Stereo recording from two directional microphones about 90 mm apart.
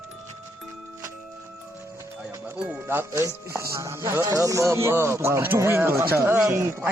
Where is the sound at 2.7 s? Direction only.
25° right (ahead or behind).